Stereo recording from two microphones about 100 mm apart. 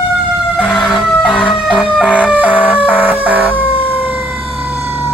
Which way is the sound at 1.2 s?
15° left (ahead or behind).